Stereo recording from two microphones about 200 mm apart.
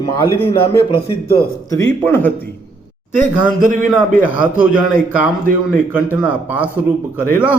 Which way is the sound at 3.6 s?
40° right (ahead or behind).